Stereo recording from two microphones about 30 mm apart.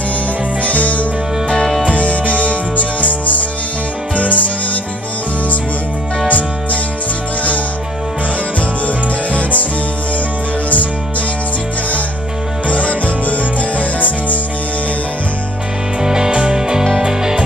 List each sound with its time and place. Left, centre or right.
0.7 s music: left
6.2 s music: left
8.5 s music: left
12.6 s music: left
16.0 s music: right